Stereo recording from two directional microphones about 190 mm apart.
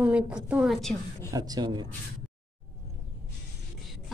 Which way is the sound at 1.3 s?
20° right (ahead or behind).